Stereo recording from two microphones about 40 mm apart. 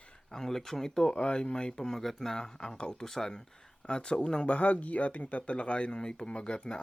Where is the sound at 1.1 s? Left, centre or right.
Left.